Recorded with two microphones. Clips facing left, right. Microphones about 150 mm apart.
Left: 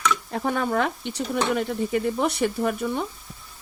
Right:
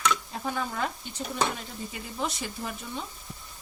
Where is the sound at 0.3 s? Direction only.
65° left (ahead or behind).